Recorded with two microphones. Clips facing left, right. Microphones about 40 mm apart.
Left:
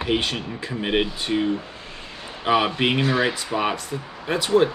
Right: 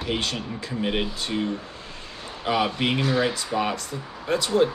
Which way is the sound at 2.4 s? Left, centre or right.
Left.